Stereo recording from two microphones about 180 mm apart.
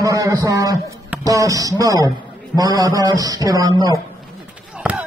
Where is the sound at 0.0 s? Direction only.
20° right (ahead or behind).